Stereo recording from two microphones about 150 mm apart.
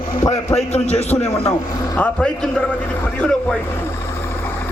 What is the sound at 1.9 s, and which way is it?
Speech, 5° left (ahead or behind).